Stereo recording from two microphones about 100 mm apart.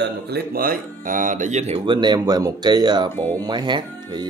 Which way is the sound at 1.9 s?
50° right (ahead or behind).